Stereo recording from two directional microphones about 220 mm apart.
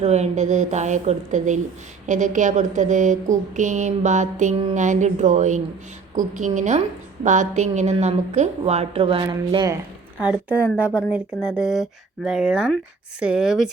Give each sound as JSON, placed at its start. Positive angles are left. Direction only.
{"t": 0.0, "sound": "a woman's voice", "side_deg": -30}
{"t": 10.2, "sound": "a woman's voice", "side_deg": -5}